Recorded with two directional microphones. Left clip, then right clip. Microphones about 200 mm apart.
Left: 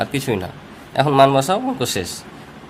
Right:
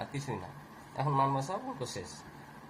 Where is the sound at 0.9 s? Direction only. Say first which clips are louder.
Left 17 dB; 90° left.